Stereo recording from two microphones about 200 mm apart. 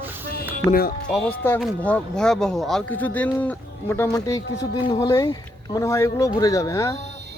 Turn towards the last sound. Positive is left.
turn(degrees=15)  # may be behind; listen again after turning